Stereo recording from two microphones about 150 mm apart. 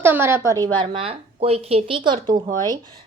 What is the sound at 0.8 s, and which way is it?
A woman's voice, 35° right (ahead or behind).